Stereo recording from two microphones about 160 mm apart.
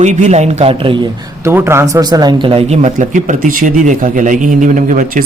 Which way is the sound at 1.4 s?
15° right (ahead or behind).